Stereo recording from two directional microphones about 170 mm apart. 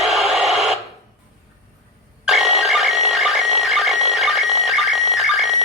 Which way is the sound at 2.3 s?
Centre (ahead or behind).